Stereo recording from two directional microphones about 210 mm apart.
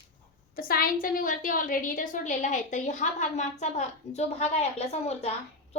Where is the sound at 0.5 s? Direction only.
45° left (ahead or behind).